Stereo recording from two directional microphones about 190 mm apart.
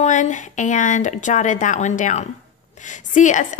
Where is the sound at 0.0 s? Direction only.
40° left (ahead or behind).